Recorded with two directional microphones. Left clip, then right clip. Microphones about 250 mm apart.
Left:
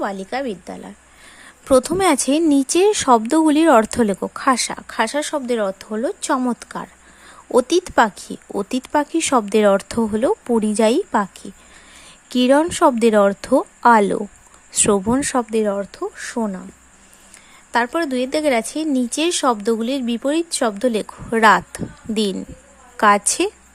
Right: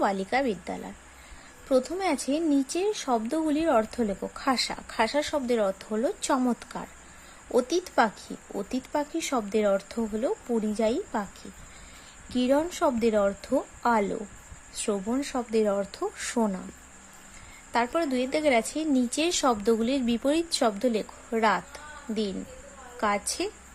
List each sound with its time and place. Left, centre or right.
0.0 s speech: centre
1.6 s speech: left
12.3 s speech: left
17.7 s speech: centre